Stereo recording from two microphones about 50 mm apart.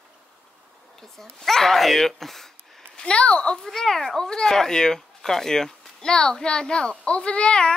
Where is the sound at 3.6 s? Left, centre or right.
Centre.